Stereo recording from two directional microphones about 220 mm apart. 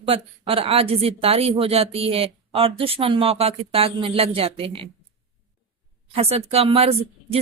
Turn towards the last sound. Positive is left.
turn(degrees=-25)  # may be behind; listen again after turning